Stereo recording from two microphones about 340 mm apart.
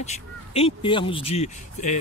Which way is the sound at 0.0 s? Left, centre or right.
Centre.